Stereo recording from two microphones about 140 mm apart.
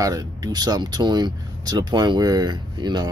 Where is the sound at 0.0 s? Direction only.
30° right (ahead or behind).